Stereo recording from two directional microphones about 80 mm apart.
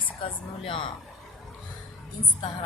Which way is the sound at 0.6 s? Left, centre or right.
Left.